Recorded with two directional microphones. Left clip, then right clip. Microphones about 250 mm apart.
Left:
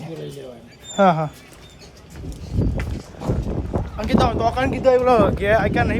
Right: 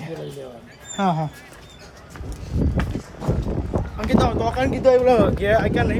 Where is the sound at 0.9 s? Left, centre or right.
Centre.